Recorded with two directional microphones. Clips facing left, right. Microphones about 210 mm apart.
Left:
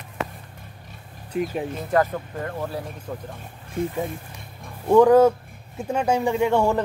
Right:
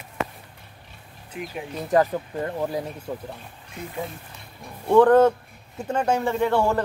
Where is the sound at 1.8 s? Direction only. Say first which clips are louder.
Right 2 dB; 15° right (ahead or behind).